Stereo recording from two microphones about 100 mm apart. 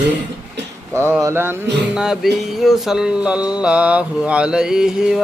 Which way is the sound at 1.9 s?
5° right (ahead or behind).